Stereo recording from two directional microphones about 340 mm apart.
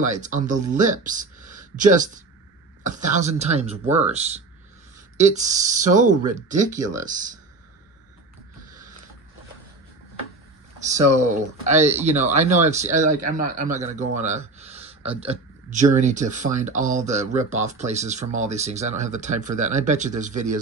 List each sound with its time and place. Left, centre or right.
0.2 s speech: right
10.9 s a man's voice: right